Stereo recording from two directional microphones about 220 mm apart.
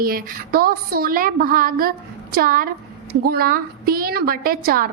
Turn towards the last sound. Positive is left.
turn(degrees=-40)  # may be behind; listen again after turning